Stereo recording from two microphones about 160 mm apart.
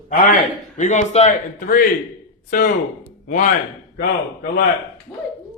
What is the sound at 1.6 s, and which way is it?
A man's voice, 60° left (ahead or behind).